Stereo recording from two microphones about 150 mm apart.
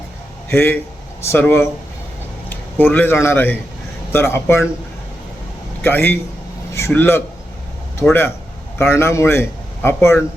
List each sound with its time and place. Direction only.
0.5 s a man's voice: 15° left (ahead or behind)
5.8 s a man's voice: 15° left (ahead or behind)
8.8 s a man's voice: 15° left (ahead or behind)